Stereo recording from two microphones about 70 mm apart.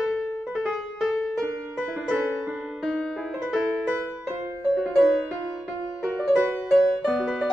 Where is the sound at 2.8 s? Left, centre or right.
Centre.